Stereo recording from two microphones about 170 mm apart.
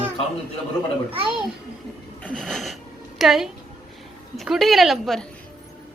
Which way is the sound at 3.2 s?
Centre (ahead or behind).